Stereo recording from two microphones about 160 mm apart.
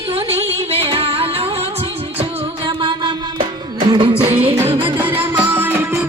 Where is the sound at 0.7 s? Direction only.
35° right (ahead or behind).